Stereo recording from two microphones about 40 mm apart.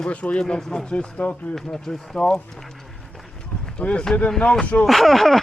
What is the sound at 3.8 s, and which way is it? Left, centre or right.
Speech, left.